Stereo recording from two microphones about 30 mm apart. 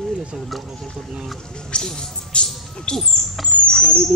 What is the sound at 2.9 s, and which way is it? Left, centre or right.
Rodents, centre.